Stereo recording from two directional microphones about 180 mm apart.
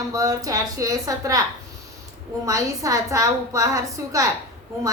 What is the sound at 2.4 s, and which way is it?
A woman's voice, 15° right (ahead or behind).